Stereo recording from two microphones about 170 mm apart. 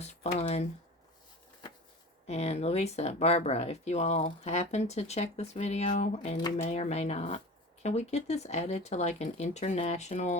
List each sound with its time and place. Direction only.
0.0 s speech: 40° left (ahead or behind)
2.2 s speech: 40° left (ahead or behind)
6.3 s speech: 25° left (ahead or behind)
6.7 s speech: 40° left (ahead or behind)